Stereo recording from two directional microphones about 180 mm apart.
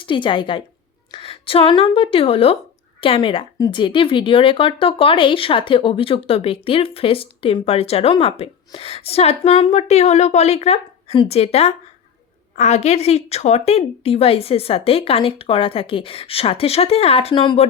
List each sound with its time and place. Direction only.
0.0 s a woman's voice: 25° left (ahead or behind)